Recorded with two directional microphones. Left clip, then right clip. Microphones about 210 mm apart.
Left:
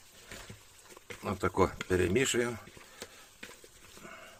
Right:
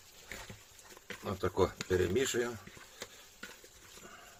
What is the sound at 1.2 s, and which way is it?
Speech, 35° left (ahead or behind).